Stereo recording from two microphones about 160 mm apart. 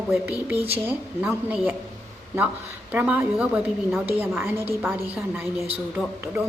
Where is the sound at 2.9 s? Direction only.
10° right (ahead or behind).